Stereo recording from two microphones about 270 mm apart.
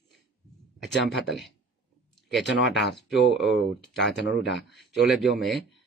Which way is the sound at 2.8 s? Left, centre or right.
Left.